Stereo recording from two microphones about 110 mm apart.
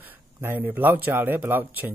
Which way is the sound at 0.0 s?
20° right (ahead or behind).